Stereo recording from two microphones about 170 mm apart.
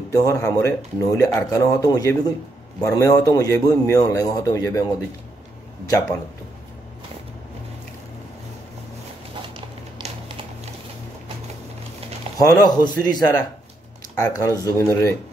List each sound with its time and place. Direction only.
0.1 s speech: 20° left (ahead or behind)
10.0 s a sound: 40° right (ahead or behind)
12.4 s speech: 20° left (ahead or behind)